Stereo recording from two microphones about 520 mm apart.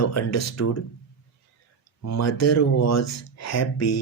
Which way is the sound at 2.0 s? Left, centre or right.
Left.